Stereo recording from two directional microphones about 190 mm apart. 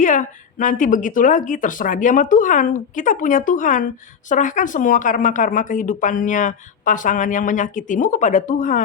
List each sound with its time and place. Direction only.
0.0 s speech: 40° left (ahead or behind)